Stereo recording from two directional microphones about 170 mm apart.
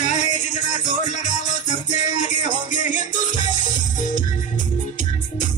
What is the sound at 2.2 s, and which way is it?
Music, 50° left (ahead or behind).